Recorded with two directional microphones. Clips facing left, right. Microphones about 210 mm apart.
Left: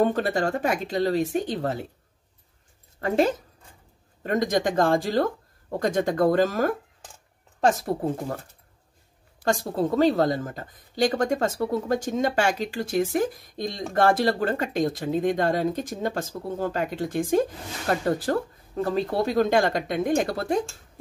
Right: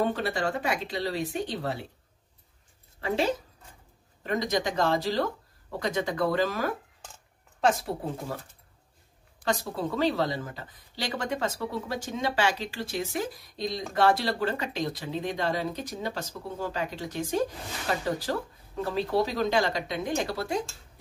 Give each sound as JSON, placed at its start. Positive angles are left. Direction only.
{"t": 0.0, "sound": "a woman's voice", "side_deg": 45}
{"t": 4.2, "sound": "a woman's voice", "side_deg": 45}
{"t": 9.4, "sound": "a woman's voice", "side_deg": 45}